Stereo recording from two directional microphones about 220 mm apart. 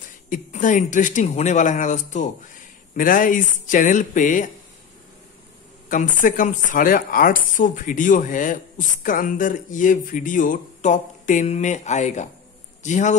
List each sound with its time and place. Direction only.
0.3 s speech: 35° left (ahead or behind)
5.9 s a man's voice: 35° left (ahead or behind)